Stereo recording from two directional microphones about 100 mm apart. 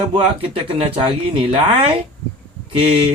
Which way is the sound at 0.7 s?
80° right.